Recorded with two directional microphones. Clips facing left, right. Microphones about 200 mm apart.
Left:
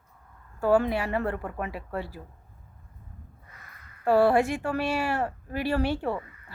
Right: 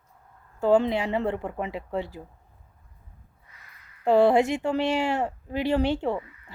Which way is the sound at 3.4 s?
50° left (ahead or behind).